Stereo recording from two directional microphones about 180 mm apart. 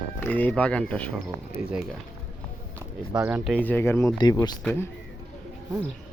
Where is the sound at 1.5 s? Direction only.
15° right (ahead or behind).